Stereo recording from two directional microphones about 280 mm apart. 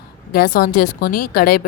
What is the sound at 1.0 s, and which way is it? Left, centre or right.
Speech, left.